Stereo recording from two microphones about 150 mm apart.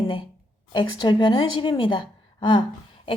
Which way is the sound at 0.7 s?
30° left (ahead or behind).